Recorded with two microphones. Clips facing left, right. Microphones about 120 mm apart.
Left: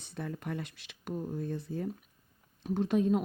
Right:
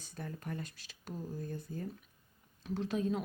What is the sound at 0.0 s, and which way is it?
Speech, 70° left (ahead or behind).